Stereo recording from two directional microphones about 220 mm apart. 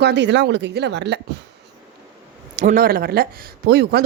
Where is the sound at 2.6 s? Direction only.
40° right (ahead or behind).